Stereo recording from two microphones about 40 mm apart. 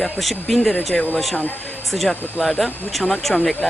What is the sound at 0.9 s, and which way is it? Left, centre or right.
Speech, centre.